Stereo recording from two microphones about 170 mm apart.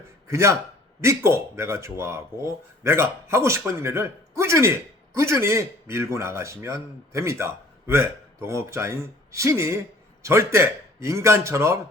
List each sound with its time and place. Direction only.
0.3 s speech: 15° right (ahead or behind)